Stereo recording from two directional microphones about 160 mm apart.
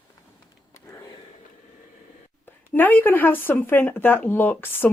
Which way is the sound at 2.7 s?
10° left (ahead or behind).